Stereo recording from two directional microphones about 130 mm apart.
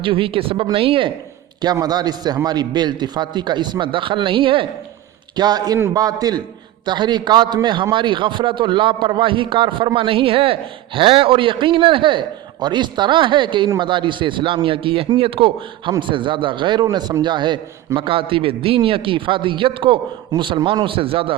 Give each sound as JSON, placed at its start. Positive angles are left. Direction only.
{"t": 0.0, "sound": "speech", "side_deg": -40}
{"t": 1.6, "sound": "a man's voice", "side_deg": -30}
{"t": 5.4, "sound": "a man's voice", "side_deg": -30}